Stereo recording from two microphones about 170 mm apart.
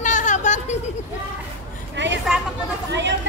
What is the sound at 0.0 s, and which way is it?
Chatter, 45° left (ahead or behind).